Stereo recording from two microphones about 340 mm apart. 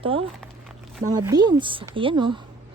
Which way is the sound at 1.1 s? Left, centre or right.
Centre.